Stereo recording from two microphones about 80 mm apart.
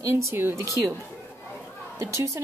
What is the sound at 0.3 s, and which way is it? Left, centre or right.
Speech, right.